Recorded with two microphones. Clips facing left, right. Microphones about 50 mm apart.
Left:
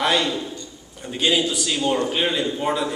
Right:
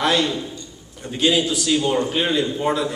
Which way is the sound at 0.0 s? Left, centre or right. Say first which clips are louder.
Right 1 dB; centre.